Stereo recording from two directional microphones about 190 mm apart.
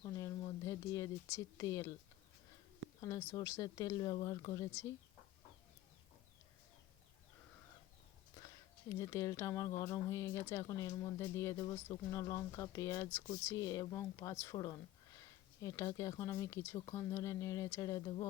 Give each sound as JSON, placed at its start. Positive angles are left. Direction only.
{"t": 0.0, "sound": "a sound", "side_deg": 15}
{"t": 3.0, "sound": "speech", "side_deg": 15}
{"t": 8.9, "sound": "speech", "side_deg": 15}